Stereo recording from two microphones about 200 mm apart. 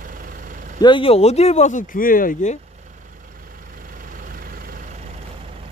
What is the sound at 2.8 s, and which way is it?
Vehicle, 40° right (ahead or behind).